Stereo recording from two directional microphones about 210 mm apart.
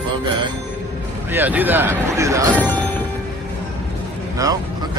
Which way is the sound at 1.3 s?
10° right (ahead or behind).